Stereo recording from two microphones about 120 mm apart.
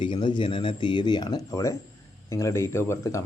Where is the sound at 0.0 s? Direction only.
40° left (ahead or behind).